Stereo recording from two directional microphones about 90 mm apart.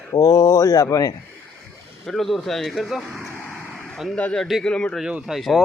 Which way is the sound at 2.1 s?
Centre (ahead or behind).